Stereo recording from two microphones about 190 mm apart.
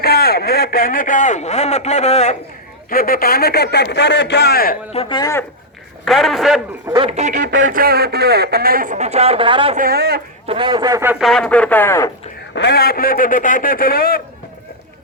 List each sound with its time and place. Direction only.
0.0 s speech: 55° left (ahead or behind); by 2.4 s 35° left (ahead or behind)
2.9 s a man's voice: 50° left (ahead or behind)
4.9 s speech: 30° left (ahead or behind)
6.1 s a man's voice: centre (ahead or behind)
6.8 s speech: 20° right (ahead or behind)
7.1 s speech: 35° right (ahead or behind)
7.6 s speech: 50° right (ahead or behind); by 9.7 s 25° right (ahead or behind)
9.7 s speech: 50° right (ahead or behind)
10.4 s speech: 30° right (ahead or behind)
11.2 s speech: centre (ahead or behind)
12.5 s a man's voice: 60° left (ahead or behind)